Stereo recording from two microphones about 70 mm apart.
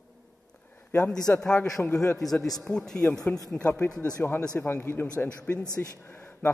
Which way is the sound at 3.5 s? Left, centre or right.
Left.